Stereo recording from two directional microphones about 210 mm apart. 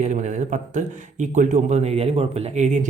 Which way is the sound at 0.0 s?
35° right (ahead or behind).